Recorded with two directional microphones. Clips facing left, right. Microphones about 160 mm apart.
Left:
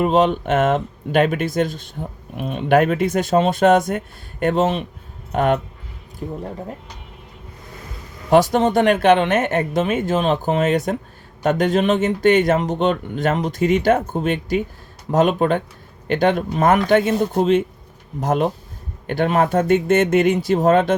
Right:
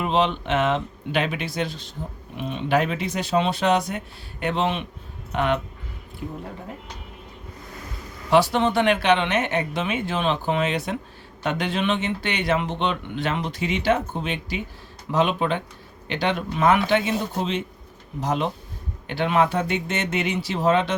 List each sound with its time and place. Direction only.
0.0 s speech: 45° left (ahead or behind)
8.3 s speech: 45° left (ahead or behind)